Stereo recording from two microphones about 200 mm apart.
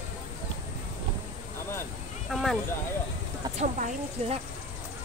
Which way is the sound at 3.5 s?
35° right (ahead or behind).